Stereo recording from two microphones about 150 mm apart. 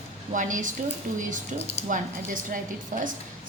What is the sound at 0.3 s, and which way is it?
A woman's voice, 60° right (ahead or behind).